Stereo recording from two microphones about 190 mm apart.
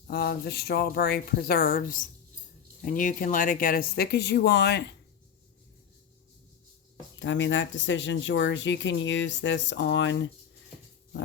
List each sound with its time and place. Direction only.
0.1 s speech: 55° left (ahead or behind)
7.2 s speech: 75° left (ahead or behind)